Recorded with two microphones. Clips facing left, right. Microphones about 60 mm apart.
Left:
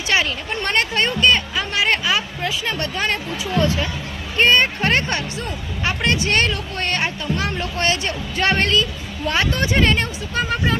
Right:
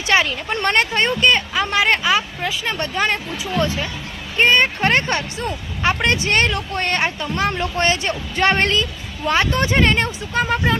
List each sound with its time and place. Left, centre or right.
0.1 s a woman's voice: right